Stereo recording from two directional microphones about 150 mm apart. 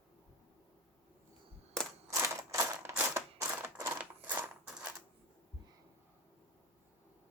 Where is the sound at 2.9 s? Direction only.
15° right (ahead or behind).